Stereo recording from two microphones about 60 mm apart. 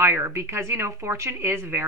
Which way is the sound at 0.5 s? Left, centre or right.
Right.